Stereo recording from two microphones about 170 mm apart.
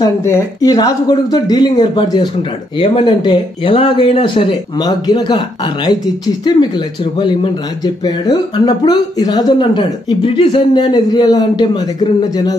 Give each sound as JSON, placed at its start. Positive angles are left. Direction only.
{"t": 0.0, "sound": "speech", "side_deg": 15}